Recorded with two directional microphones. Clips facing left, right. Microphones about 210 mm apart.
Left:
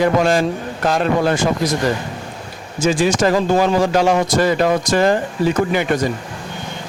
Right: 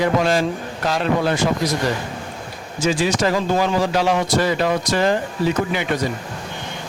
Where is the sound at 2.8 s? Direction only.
45° left (ahead or behind).